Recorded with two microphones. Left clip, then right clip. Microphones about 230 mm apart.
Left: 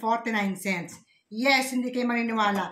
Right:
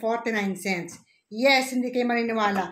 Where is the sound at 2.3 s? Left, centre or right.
Left.